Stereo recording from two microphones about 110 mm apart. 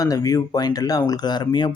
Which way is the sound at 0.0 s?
35° left (ahead or behind).